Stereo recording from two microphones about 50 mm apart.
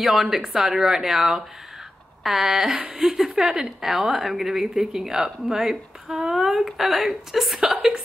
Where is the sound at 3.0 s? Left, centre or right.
Centre.